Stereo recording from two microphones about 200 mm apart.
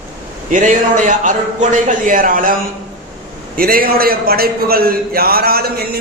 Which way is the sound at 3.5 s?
50° right (ahead or behind).